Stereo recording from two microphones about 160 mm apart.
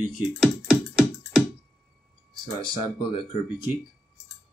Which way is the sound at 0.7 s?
5° right (ahead or behind).